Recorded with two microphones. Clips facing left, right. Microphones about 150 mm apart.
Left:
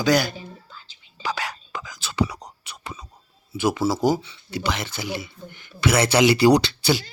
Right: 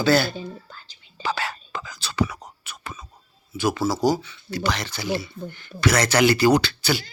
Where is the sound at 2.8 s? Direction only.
15° left (ahead or behind).